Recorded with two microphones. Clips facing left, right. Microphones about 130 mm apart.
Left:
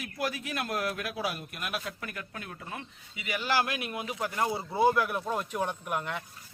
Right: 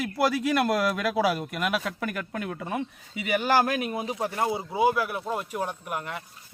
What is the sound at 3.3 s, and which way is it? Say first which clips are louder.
Speech: right 6 dB; 50° right (ahead or behind).